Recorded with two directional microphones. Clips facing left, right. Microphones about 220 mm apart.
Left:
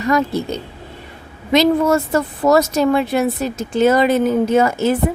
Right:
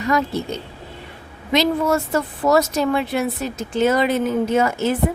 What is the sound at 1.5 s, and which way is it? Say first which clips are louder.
Speech: left 4 dB; 45° left (ahead or behind).